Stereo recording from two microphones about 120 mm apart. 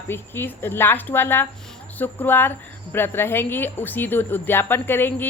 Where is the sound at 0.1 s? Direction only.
20° left (ahead or behind).